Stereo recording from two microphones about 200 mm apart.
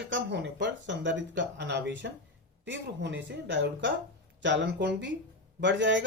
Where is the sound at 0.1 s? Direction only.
60° right (ahead or behind).